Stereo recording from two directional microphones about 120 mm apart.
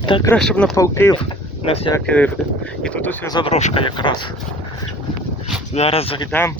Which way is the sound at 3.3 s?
40° left (ahead or behind).